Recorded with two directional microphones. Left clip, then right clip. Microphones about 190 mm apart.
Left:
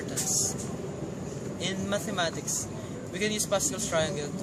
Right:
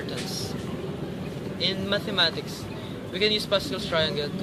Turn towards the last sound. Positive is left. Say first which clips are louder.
# right 3 dB
turn(degrees=15)  # may be behind; listen again after turning